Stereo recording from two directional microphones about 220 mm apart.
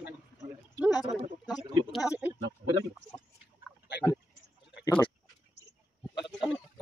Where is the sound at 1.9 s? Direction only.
15° left (ahead or behind).